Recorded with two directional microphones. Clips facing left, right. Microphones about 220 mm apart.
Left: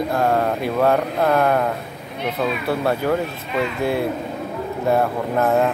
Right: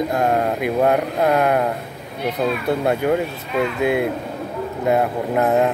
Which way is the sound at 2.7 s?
20° right (ahead or behind).